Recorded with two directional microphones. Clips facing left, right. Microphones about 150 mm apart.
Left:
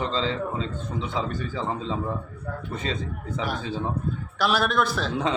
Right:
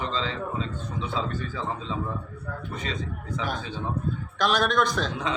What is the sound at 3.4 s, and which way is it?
A man's voice, 5° left (ahead or behind).